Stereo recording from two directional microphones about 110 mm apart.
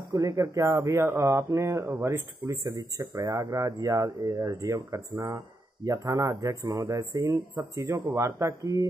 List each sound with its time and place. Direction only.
0.1 s speech: 30° right (ahead or behind)